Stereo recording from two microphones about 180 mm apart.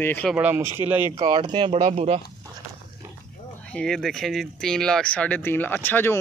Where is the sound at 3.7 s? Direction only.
5° left (ahead or behind).